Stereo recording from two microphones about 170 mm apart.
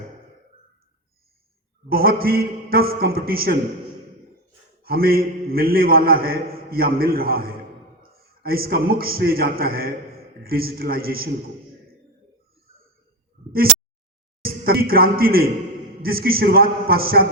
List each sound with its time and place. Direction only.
1.9 s a man's voice: 60° right (ahead or behind)
4.8 s a man's voice: 60° right (ahead or behind)
14.4 s a man's voice: 65° right (ahead or behind)